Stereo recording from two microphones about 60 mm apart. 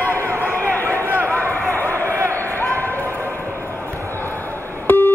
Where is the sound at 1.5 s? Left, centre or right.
Left.